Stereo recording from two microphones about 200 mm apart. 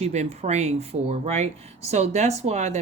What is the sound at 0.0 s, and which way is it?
Speech, 35° right (ahead or behind).